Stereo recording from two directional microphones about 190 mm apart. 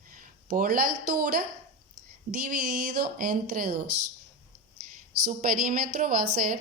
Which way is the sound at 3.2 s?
45° right (ahead or behind).